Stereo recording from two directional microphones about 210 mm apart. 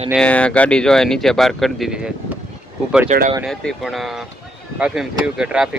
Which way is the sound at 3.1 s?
35° right (ahead or behind).